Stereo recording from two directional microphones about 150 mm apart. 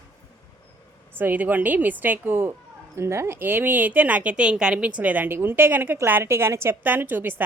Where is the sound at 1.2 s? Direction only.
10° right (ahead or behind).